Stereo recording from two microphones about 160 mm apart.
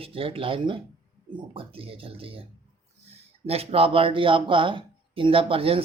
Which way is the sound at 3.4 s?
35° right (ahead or behind).